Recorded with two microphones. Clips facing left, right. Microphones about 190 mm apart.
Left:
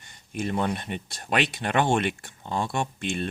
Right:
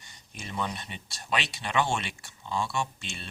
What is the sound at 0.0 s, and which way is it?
Speech, 55° left (ahead or behind).